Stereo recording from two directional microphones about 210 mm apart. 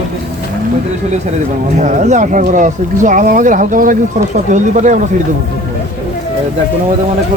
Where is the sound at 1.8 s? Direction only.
35° right (ahead or behind).